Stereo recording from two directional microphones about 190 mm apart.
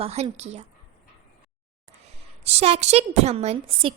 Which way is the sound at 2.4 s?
35° right (ahead or behind).